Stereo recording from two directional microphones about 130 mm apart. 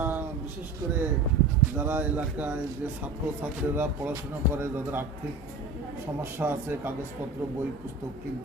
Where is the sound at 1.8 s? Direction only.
15° right (ahead or behind).